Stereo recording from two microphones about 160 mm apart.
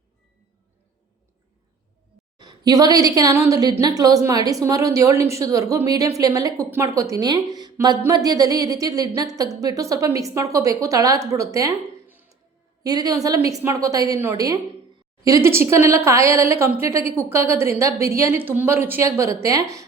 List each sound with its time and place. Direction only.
2.4 s a woman's voice: 25° right (ahead or behind)
12.8 s a woman's voice: 25° right (ahead or behind)